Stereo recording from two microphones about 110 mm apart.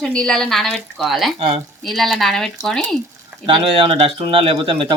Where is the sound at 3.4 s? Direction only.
55° right (ahead or behind).